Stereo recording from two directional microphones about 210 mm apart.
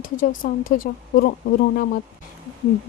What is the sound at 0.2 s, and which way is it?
Speech, 40° left (ahead or behind).